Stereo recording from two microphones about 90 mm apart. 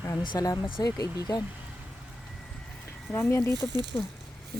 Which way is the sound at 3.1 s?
30° left (ahead or behind).